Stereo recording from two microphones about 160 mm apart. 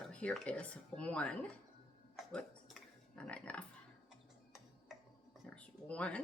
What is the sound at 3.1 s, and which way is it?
Pig, 10° left (ahead or behind).